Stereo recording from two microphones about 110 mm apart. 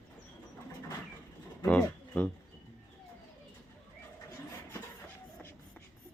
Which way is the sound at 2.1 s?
10° left (ahead or behind).